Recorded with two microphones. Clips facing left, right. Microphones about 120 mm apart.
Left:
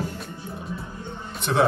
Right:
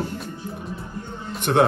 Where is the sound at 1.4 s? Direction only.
60° right (ahead or behind).